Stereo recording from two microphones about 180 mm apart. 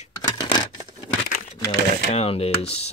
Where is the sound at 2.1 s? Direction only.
35° left (ahead or behind).